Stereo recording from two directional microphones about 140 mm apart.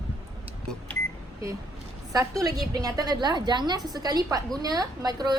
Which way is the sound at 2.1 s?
25° right (ahead or behind).